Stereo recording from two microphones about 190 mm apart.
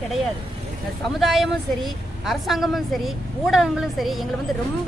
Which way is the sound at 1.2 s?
Centre (ahead or behind).